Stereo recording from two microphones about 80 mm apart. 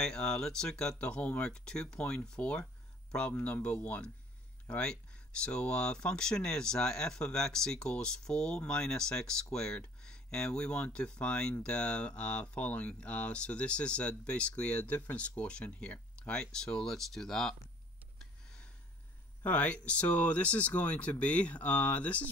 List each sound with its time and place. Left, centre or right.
0.0 s speech: centre
18.2 s a sound: centre
19.4 s speech: centre